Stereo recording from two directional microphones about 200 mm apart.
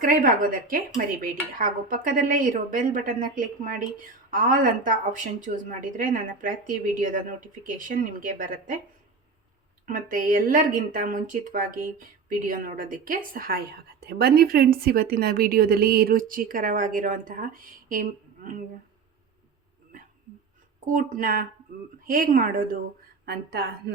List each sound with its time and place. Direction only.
0.0 s speech: 45° right (ahead or behind)
9.8 s speech: 45° right (ahead or behind)
20.8 s speech: 45° right (ahead or behind)